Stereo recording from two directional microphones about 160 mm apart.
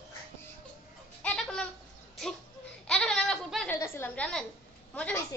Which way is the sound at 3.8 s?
15° left (ahead or behind).